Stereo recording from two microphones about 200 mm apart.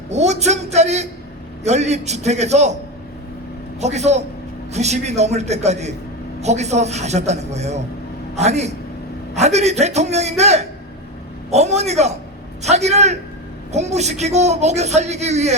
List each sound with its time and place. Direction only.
0.1 s a man's voice: 35° right (ahead or behind)
3.8 s a man's voice: 35° right (ahead or behind)